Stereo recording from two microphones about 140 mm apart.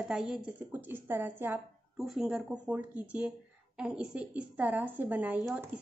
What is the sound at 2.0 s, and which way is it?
A woman's voice, 5° right (ahead or behind).